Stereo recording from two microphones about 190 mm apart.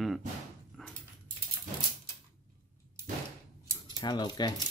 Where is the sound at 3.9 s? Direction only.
20° left (ahead or behind).